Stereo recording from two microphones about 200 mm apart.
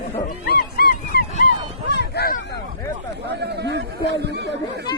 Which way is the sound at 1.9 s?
55° left (ahead or behind).